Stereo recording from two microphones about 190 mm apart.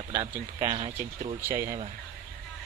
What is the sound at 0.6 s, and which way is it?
Speech, 30° right (ahead or behind).